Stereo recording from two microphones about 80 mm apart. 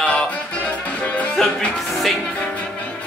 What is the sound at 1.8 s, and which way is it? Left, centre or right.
Music, centre.